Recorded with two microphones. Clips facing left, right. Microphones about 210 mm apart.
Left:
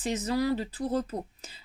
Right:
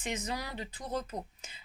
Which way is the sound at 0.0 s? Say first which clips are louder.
Left 9 dB; 35° left (ahead or behind).